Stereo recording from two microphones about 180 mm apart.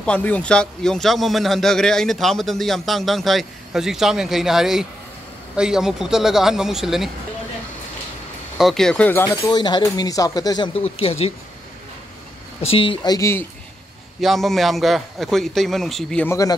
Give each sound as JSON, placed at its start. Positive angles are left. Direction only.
{"t": 0.0, "sound": "speech", "side_deg": 10}
{"t": 8.5, "sound": "speech", "side_deg": 0}
{"t": 12.6, "sound": "speech", "side_deg": 30}
{"t": 14.2, "sound": "speech", "side_deg": 0}